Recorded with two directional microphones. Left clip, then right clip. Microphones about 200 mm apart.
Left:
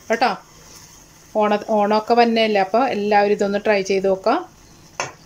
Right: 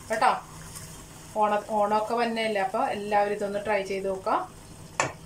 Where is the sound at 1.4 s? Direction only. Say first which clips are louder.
Left 7 dB; 50° left (ahead or behind).